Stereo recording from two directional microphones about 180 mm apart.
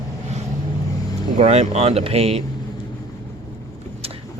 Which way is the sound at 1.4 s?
35° right (ahead or behind).